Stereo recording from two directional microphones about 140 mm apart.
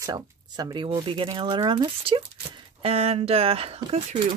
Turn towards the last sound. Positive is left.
turn(degrees=-45)  # may be behind; listen again after turning